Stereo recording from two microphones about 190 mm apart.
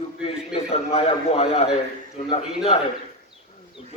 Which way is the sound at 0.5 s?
30° left (ahead or behind).